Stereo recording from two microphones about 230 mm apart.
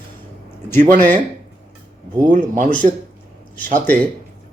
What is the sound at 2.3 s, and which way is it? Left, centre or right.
Speech, right.